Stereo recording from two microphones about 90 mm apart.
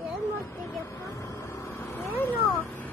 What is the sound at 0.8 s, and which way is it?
Vehicle, 30° left (ahead or behind).